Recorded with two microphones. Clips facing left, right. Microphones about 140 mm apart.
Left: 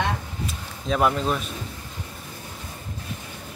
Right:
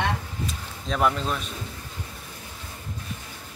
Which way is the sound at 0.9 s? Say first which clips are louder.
Left 2 dB; 10° left (ahead or behind).